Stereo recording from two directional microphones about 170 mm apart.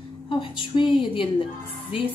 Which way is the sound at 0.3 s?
30° left (ahead or behind).